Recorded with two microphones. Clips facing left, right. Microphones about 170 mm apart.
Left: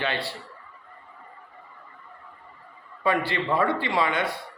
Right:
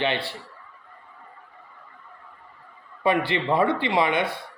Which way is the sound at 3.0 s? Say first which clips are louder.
Right 2 dB; 20° right (ahead or behind).